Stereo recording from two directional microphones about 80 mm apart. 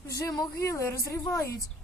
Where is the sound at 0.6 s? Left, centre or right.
Left.